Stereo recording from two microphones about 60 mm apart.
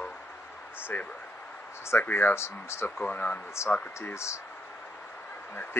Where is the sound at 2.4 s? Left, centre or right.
Left.